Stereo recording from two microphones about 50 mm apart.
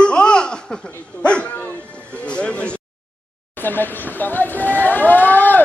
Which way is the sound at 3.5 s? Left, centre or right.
Left.